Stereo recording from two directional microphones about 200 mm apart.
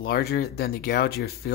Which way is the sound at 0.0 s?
50° left (ahead or behind).